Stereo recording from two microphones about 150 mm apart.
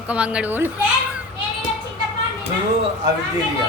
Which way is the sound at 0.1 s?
10° right (ahead or behind).